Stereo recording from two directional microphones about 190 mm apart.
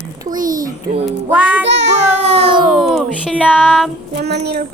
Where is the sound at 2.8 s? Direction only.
Centre (ahead or behind).